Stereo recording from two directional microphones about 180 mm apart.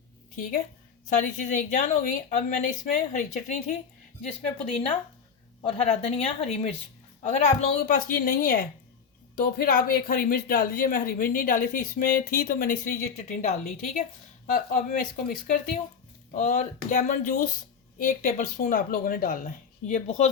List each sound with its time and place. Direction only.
1.1 s a woman's voice: 45° left (ahead or behind)